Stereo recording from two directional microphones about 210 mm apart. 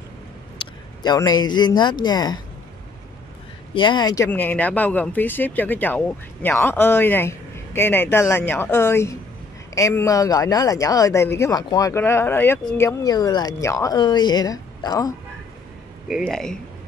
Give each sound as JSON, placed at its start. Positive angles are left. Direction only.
{"t": 0.6, "sound": "speech", "side_deg": 20}
{"t": 3.7, "sound": "speech", "side_deg": 20}
{"t": 16.1, "sound": "speech", "side_deg": 0}